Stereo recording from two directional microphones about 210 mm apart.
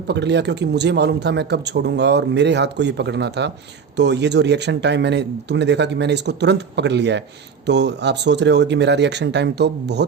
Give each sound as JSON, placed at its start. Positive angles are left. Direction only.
{"t": 0.1, "sound": "speech", "side_deg": -55}